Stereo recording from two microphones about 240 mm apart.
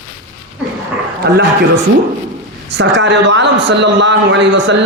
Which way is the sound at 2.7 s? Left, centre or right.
Right.